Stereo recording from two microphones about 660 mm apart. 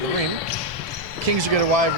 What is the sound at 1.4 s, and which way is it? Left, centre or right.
Speech, right.